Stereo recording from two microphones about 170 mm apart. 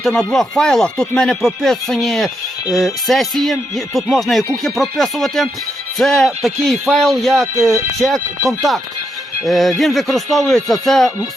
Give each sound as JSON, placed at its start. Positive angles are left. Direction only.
{"t": 0.0, "sound": "speech", "side_deg": 5}
{"t": 7.5, "sound": "speech", "side_deg": -15}
{"t": 9.4, "sound": "speech", "side_deg": 0}